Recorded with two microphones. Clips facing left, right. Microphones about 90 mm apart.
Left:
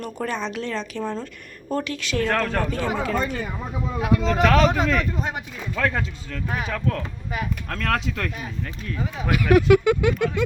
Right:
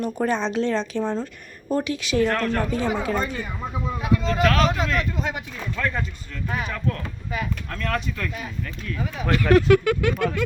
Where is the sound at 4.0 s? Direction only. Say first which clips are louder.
Left 2 dB; 65° left (ahead or behind).